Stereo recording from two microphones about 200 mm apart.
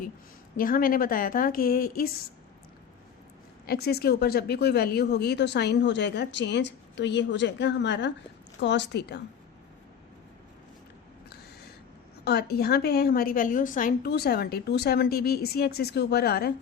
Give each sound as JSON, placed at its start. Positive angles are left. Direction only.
{"t": 0.5, "sound": "a woman's voice", "side_deg": 45}
{"t": 3.7, "sound": "speech", "side_deg": 50}
{"t": 12.2, "sound": "a woman's voice", "side_deg": 55}